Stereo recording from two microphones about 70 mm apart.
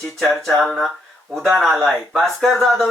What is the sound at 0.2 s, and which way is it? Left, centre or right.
Speech, centre.